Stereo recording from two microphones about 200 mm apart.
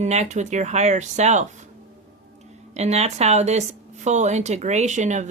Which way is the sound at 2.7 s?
30° right (ahead or behind).